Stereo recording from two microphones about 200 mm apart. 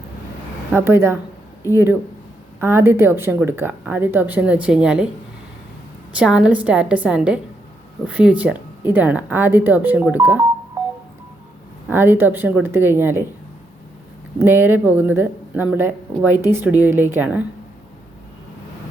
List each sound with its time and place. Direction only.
0.7 s speech: 10° right (ahead or behind)
6.1 s a woman's voice: 5° right (ahead or behind)
11.9 s speech: 10° right (ahead or behind)
14.3 s speech: 10° right (ahead or behind)